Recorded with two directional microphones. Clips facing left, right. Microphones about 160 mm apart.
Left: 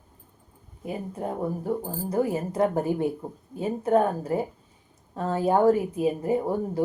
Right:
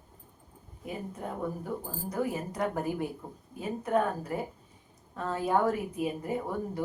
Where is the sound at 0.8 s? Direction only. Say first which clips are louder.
Left 6 dB; 30° left (ahead or behind).